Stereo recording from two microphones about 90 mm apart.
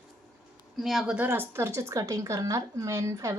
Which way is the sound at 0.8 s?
5° right (ahead or behind).